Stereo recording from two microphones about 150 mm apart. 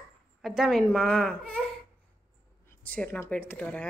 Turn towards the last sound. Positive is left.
turn(degrees=10)  # may be behind; listen again after turning